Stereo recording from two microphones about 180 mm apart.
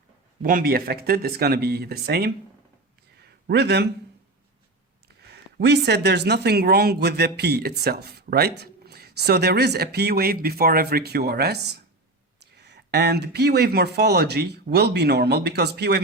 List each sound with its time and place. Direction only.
0.4 s speech: 55° right (ahead or behind)
3.4 s a man's voice: 65° right (ahead or behind)
5.3 s speech: 65° right (ahead or behind)